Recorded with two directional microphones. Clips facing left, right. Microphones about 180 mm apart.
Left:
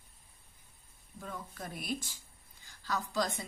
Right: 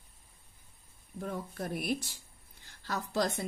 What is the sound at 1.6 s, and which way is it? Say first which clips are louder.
A woman's voice: right 5 dB; 55° right (ahead or behind).